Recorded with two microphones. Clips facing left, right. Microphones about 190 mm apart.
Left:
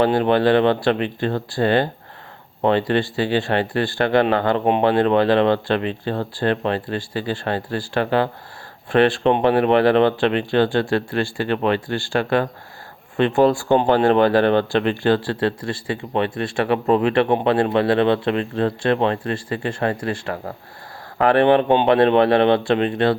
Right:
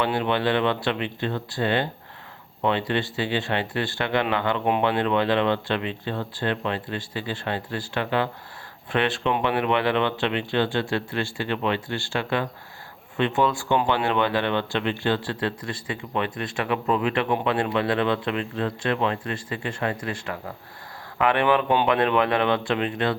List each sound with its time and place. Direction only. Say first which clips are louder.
0.0 s speech: left 7 dB; 40° left (ahead or behind)